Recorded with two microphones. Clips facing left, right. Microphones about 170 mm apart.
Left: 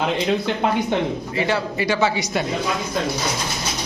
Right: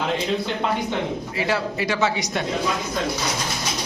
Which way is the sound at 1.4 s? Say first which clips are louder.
Left 2 dB; centre (ahead or behind).